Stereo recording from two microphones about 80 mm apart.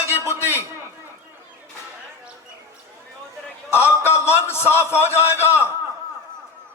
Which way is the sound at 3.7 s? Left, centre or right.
Left.